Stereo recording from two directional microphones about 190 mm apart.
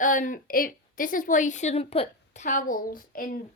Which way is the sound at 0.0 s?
45° left (ahead or behind).